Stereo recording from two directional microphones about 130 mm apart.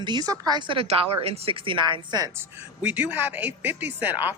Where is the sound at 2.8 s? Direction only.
10° right (ahead or behind).